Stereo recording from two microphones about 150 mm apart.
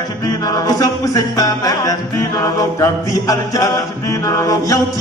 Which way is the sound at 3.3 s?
25° left (ahead or behind).